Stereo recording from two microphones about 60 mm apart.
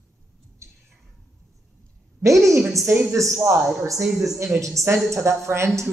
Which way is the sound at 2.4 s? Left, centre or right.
Right.